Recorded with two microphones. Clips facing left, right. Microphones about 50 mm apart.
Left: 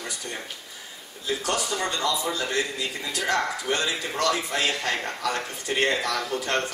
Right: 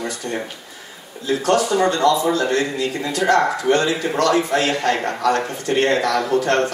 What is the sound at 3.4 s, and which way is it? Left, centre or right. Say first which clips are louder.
Speech: right 9 dB; centre.